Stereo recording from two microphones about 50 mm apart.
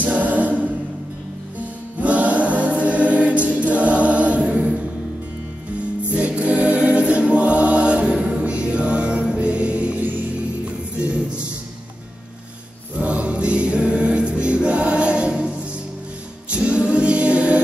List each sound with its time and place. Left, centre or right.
0.0 s a capella: right
2.0 s choir: right
6.1 s choir: right
11.0 s music: right
12.9 s music: right